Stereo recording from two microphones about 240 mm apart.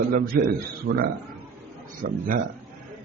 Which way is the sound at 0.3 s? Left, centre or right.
Right.